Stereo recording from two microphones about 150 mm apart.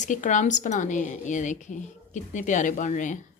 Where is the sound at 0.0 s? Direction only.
55° left (ahead or behind).